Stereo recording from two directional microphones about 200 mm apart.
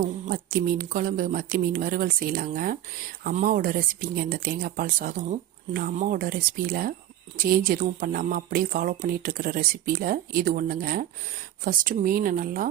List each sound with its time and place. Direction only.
0.3 s speech: 45° right (ahead or behind)